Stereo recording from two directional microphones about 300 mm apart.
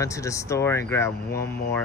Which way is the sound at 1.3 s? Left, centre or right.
Left.